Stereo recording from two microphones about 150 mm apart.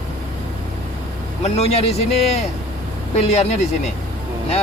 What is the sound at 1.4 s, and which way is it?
Speech, 45° left (ahead or behind).